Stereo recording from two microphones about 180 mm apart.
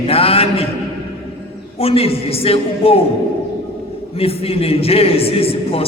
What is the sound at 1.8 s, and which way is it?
A man's voice, 30° left (ahead or behind).